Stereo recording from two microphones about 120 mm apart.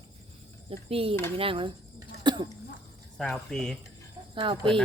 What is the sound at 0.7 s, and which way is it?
Speech, 50° right (ahead or behind).